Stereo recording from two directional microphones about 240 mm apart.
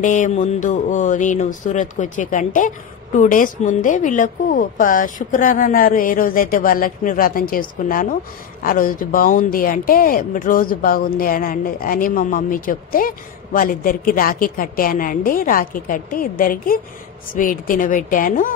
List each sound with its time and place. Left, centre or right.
0.0 s speech: left